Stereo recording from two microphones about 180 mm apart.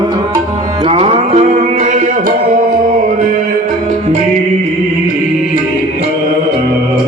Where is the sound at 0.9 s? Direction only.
35° right (ahead or behind).